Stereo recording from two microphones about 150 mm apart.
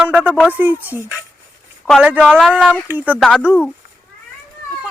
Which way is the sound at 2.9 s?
10° right (ahead or behind).